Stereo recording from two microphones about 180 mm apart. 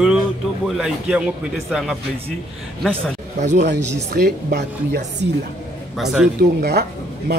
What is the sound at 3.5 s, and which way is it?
Speech, 70° right (ahead or behind).